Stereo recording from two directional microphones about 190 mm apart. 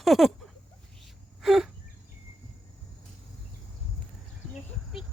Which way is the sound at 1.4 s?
Centre (ahead or behind).